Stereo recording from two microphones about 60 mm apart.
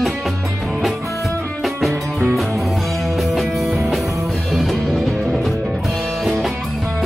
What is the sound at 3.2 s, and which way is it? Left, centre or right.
Music, centre.